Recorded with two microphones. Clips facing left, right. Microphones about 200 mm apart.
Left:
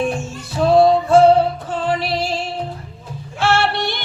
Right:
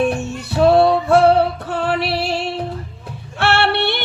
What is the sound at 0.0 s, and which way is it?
Music, 65° right (ahead or behind).